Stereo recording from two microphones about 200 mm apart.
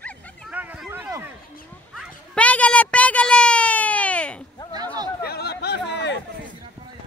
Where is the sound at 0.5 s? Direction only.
10° right (ahead or behind).